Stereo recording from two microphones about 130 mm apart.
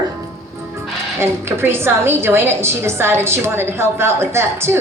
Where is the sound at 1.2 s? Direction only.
20° right (ahead or behind).